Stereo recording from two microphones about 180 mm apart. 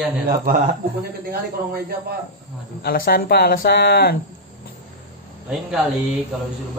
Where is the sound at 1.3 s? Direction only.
60° right (ahead or behind).